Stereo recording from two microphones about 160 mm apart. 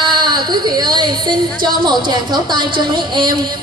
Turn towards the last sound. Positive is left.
turn(degrees=-30)  # may be behind; listen again after turning